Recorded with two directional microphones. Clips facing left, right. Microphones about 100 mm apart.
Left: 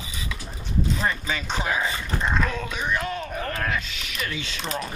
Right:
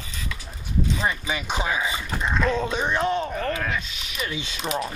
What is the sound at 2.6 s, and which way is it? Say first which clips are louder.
Speech: right 4 dB; 30° right (ahead or behind).